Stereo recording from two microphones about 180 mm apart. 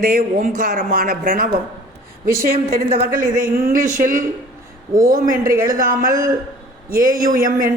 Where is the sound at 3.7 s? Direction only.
45° right (ahead or behind).